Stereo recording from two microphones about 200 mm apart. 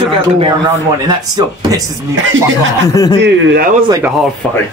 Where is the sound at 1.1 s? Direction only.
20° right (ahead or behind).